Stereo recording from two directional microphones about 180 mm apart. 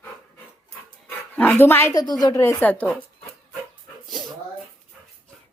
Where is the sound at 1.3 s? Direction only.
10° left (ahead or behind).